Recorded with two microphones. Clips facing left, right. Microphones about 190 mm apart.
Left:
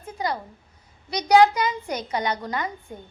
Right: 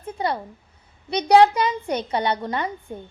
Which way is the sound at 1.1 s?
30° right (ahead or behind).